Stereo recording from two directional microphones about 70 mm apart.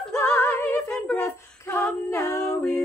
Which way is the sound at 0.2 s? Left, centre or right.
Left.